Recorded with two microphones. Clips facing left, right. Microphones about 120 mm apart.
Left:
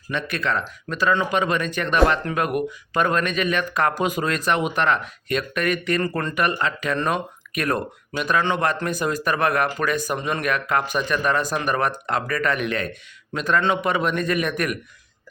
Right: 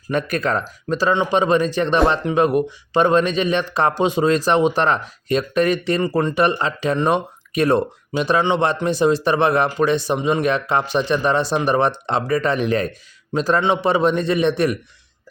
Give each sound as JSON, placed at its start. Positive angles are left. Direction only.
{"t": 0.1, "sound": "speech", "side_deg": -45}
{"t": 10.2, "sound": "speech", "side_deg": -15}
{"t": 10.4, "sound": "speech", "side_deg": -30}